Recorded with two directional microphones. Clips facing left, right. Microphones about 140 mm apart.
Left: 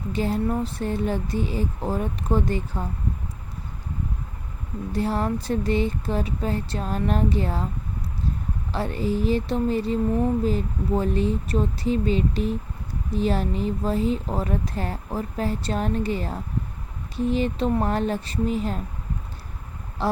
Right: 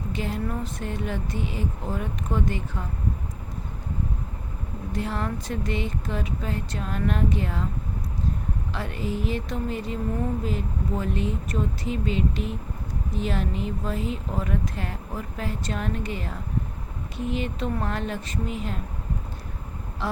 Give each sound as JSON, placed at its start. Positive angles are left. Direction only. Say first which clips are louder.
{"t": 0.1, "sound": "speech", "louder": "left 6 dB", "side_deg": 35}
{"t": 4.9, "sound": "speech", "louder": "left 5 dB", "side_deg": 35}
{"t": 8.7, "sound": "speech", "louder": "left 6 dB", "side_deg": 35}